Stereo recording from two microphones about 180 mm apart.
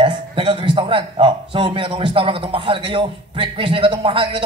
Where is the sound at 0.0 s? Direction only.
25° right (ahead or behind).